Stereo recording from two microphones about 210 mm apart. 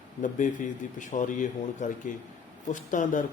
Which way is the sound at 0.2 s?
40° left (ahead or behind).